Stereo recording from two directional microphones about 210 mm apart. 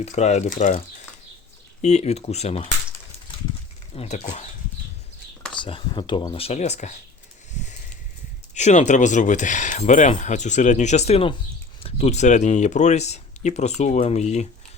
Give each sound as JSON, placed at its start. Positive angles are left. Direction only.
{"t": 0.0, "sound": "speech", "side_deg": 30}
{"t": 1.8, "sound": "speech", "side_deg": 30}
{"t": 3.9, "sound": "speech", "side_deg": 30}
{"t": 5.5, "sound": "speech", "side_deg": 25}
{"t": 8.5, "sound": "speech", "side_deg": 35}